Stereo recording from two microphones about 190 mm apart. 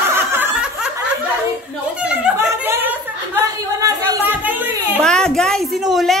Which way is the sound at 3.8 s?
15° right (ahead or behind).